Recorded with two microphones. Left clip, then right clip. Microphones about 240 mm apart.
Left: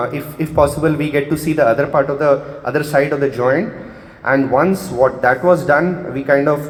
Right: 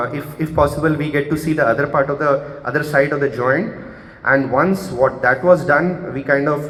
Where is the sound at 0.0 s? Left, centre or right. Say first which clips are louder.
Left 1 dB; left.